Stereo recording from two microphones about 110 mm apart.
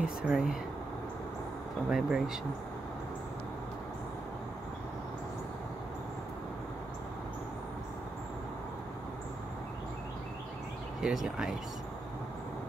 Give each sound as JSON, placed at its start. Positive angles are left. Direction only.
{"t": 0.0, "sound": "speech", "side_deg": -5}
{"t": 1.9, "sound": "speech", "side_deg": -5}
{"t": 11.0, "sound": "speech", "side_deg": -5}